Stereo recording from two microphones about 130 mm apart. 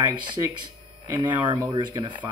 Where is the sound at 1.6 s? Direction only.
30° right (ahead or behind).